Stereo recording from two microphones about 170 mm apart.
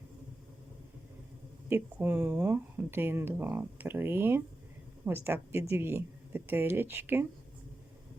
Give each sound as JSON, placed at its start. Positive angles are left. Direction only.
{"t": 1.7, "sound": "speech", "side_deg": -10}